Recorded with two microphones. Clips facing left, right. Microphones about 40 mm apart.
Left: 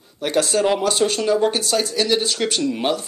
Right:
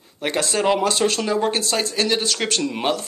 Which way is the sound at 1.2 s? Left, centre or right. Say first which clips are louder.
Left 3 dB; right.